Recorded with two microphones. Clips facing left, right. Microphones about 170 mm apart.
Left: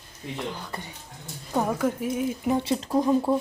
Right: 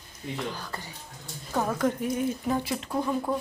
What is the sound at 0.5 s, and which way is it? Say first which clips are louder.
Speech: left 2 dB; 20° left (ahead or behind).